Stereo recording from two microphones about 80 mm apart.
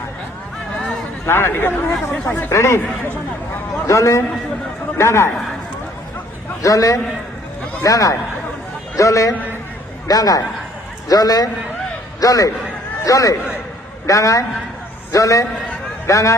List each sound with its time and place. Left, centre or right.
1.2 s speech: left
2.5 s speech: left
3.8 s speech: left
6.6 s a man's voice: left